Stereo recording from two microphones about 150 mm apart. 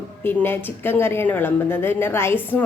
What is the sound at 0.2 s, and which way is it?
A woman's voice, 15° left (ahead or behind).